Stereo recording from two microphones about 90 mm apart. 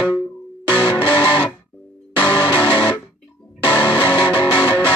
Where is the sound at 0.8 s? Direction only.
65° left (ahead or behind).